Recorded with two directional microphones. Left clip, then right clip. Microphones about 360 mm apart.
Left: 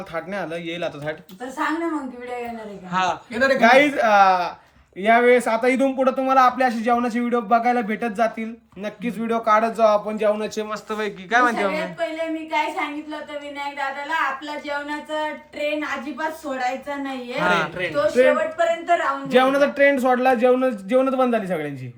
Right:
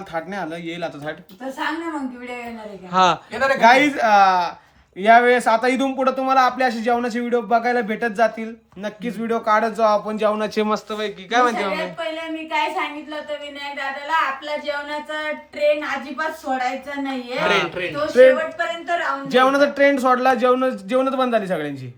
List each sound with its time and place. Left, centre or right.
0.1 s speech: centre
2.9 s speech: centre
10.4 s a man's voice: centre
10.8 s speech: centre
19.3 s speech: centre